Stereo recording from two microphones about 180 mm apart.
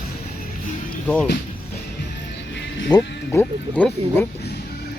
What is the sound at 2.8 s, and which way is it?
Speech, 20° left (ahead or behind).